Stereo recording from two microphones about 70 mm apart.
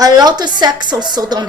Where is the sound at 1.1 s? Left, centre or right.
Right.